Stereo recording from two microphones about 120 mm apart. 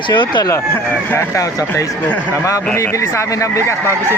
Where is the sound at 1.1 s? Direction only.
20° left (ahead or behind).